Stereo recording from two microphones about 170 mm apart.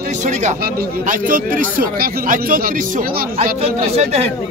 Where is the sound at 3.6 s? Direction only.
40° right (ahead or behind).